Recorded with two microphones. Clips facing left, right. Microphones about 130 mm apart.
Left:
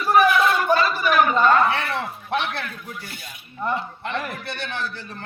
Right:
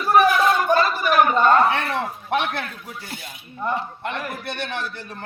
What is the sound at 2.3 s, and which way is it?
Speech, 50° right (ahead or behind).